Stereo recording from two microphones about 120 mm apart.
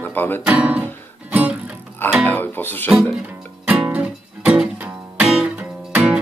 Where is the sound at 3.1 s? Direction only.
10° right (ahead or behind).